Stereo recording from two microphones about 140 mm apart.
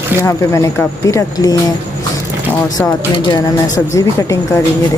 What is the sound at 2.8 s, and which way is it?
Speech, 25° left (ahead or behind).